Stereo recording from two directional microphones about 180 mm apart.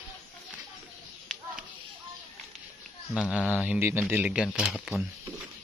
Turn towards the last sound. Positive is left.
turn(degrees=-5)  # may be behind; listen again after turning